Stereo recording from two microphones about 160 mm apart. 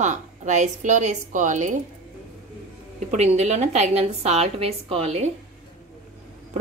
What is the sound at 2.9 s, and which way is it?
Speech, 45° right (ahead or behind).